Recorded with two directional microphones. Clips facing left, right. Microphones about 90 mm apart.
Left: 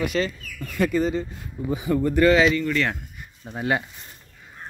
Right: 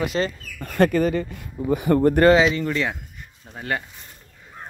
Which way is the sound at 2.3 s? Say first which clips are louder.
Right 1 dB; 25° right (ahead or behind).